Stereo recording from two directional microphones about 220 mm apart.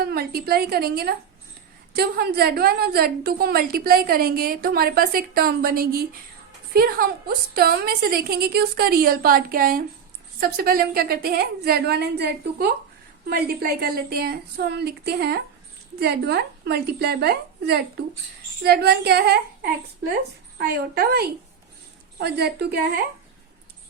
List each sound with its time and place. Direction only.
0.0 s a woman's voice: 45° right (ahead or behind)
20.6 s a woman's voice: 45° right (ahead or behind)